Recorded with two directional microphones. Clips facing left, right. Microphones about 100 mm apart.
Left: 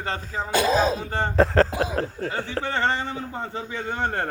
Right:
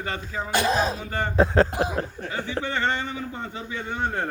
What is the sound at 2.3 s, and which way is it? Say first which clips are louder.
Speech: left 1 dB; 40° left (ahead or behind).